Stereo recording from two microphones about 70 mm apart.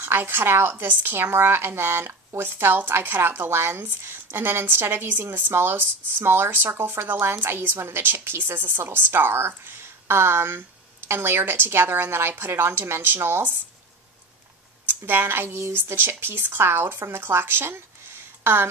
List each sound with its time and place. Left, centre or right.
0.0 s speech: right
14.9 s speech: right